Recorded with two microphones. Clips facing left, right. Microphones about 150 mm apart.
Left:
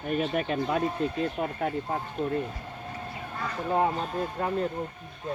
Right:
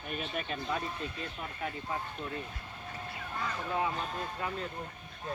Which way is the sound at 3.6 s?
45° left (ahead or behind).